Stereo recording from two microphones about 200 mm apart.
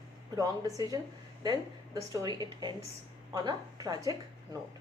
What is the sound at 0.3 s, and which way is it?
Speech, 20° right (ahead or behind).